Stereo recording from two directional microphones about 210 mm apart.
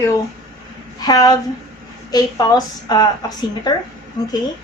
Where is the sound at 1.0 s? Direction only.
20° left (ahead or behind).